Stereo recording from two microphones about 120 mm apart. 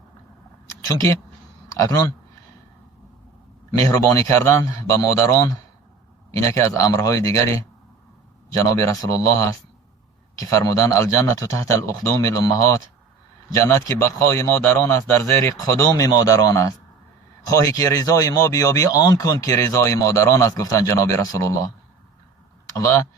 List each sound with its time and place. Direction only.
0.9 s speech: 30° left (ahead or behind)
3.9 s speech: 25° left (ahead or behind)
8.8 s speech: 25° left (ahead or behind)
22.7 s speech: 25° left (ahead or behind)